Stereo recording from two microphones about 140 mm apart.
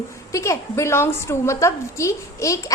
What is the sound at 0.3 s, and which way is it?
A woman's voice, 20° left (ahead or behind).